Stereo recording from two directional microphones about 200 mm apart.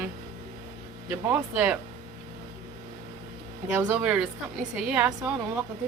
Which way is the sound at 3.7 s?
10° right (ahead or behind).